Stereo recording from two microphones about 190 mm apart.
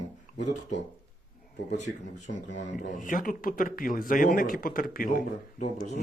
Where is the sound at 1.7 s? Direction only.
40° left (ahead or behind).